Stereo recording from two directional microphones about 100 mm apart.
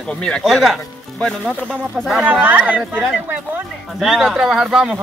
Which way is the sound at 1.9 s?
Centre (ahead or behind).